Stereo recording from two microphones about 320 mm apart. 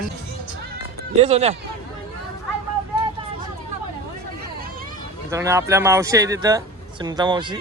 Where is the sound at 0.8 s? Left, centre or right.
Centre.